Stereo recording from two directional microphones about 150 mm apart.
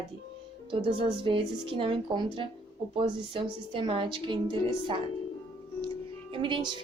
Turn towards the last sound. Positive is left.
turn(degrees=-30)  # may be behind; listen again after turning